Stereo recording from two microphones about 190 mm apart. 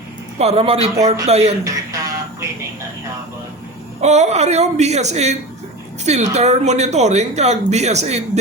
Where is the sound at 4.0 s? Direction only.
35° right (ahead or behind).